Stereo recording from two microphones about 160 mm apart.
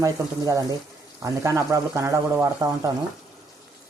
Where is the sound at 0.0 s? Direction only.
20° right (ahead or behind).